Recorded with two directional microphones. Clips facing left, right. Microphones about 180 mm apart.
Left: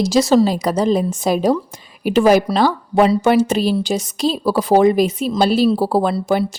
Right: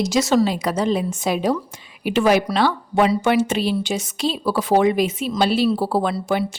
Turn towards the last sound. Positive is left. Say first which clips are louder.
# left 4 dB
turn(degrees=35)  # may be behind; listen again after turning